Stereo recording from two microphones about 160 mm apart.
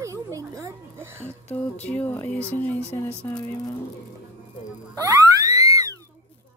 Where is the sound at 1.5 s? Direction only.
10° left (ahead or behind).